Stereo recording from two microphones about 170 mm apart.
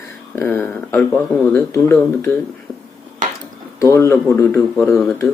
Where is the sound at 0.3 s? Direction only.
10° left (ahead or behind).